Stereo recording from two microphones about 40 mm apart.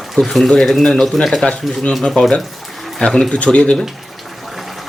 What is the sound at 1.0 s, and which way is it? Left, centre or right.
Speech, centre.